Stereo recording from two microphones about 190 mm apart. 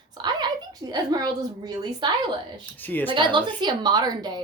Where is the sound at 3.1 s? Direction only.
25° right (ahead or behind).